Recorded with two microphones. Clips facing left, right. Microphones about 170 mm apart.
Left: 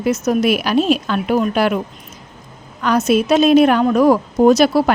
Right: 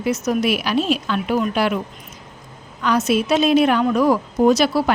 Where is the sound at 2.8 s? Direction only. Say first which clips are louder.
Left 3 dB; 45° left (ahead or behind).